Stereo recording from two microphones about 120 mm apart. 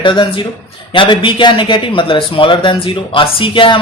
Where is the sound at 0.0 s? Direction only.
40° left (ahead or behind).